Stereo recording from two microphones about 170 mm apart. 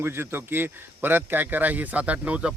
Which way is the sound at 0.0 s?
15° right (ahead or behind).